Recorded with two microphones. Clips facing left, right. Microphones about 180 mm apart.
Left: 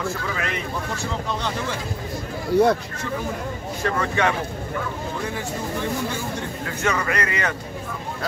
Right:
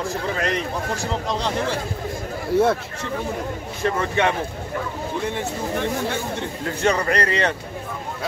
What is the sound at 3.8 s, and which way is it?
Speech, 20° right (ahead or behind).